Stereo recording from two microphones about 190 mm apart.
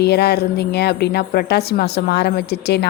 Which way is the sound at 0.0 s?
60° left (ahead or behind).